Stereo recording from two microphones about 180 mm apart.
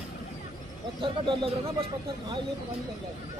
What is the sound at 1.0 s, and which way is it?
Speech, 30° right (ahead or behind).